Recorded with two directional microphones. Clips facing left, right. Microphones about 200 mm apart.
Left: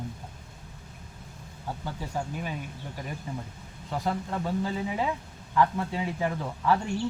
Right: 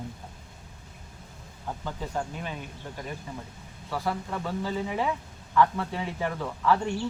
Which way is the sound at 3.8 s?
20° left (ahead or behind).